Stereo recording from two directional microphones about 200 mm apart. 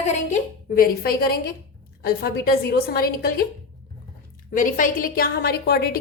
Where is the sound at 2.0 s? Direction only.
50° left (ahead or behind).